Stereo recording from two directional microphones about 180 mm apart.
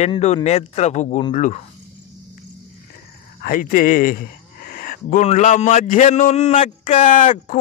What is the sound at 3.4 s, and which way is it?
Speech, 50° left (ahead or behind).